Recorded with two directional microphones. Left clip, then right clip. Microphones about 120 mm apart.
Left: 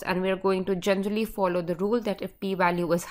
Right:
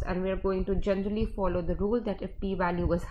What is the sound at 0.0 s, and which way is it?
A woman's voice, 55° left (ahead or behind).